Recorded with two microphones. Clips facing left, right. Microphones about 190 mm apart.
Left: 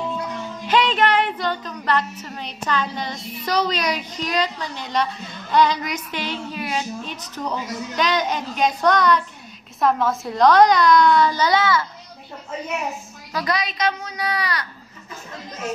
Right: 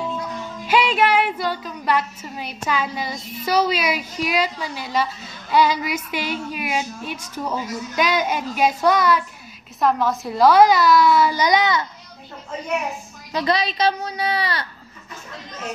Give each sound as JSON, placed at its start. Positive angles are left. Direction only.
{"t": 0.7, "sound": "a woman's voice", "side_deg": -10}
{"t": 13.3, "sound": "a woman's voice", "side_deg": -25}